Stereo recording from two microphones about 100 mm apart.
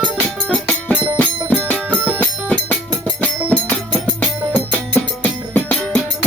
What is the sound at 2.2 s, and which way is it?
Music, 15° left (ahead or behind).